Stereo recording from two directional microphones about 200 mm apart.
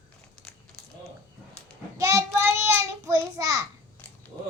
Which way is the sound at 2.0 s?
15° right (ahead or behind).